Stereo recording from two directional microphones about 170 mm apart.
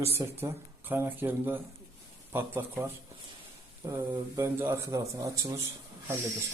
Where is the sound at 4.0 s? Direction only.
15° right (ahead or behind).